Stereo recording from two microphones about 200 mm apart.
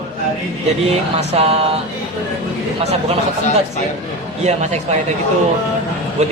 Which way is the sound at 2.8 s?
30° right (ahead or behind).